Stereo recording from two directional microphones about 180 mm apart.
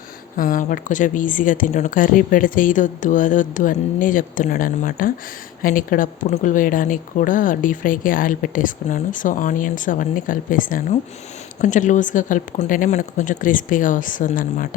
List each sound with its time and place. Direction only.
0.3 s a woman's voice: 50° left (ahead or behind)